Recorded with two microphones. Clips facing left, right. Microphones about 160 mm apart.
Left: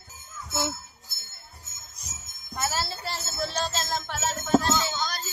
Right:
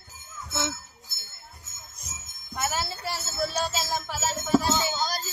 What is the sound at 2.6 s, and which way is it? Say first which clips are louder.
Music: even; 15° right (ahead or behind).